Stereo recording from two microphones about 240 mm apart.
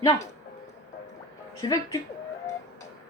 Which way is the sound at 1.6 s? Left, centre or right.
Centre.